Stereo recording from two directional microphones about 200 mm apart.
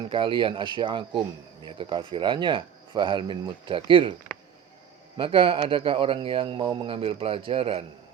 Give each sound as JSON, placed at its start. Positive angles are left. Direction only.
{"t": 0.0, "sound": "speech", "side_deg": -25}
{"t": 5.1, "sound": "speech", "side_deg": -25}